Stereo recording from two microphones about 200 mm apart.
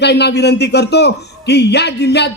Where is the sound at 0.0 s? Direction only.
55° left (ahead or behind).